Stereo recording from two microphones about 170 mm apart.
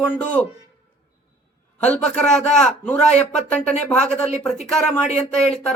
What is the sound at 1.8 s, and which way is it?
A man's voice, 5° left (ahead or behind).